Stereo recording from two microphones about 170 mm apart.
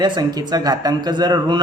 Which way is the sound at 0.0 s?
25° right (ahead or behind).